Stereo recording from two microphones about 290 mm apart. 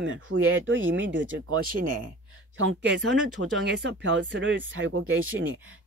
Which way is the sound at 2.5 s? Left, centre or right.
Right.